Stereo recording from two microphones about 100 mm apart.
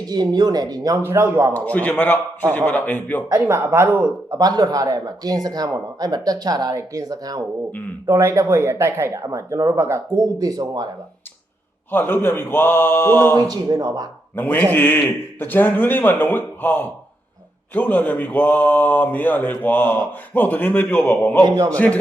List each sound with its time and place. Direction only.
0.0 s speech: 40° right (ahead or behind)
1.0 s speech: 25° right (ahead or behind)
1.5 s speech: 15° left (ahead or behind)
3.4 s speech: 25° right (ahead or behind)
4.3 s speech: 40° right (ahead or behind)
8.1 s speech: 25° right (ahead or behind)
11.9 s a man's voice: 20° left (ahead or behind)
13.5 s speech: 40° right (ahead or behind)
14.3 s a man's voice: 20° left (ahead or behind)
21.4 s speech: 35° right (ahead or behind)
21.7 s speech: 10° left (ahead or behind)